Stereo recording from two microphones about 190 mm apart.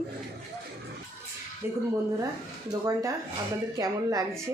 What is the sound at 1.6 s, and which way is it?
A woman's voice, 10° right (ahead or behind).